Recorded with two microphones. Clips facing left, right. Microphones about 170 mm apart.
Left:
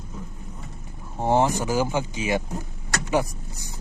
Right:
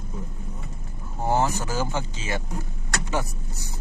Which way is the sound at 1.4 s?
15° left (ahead or behind).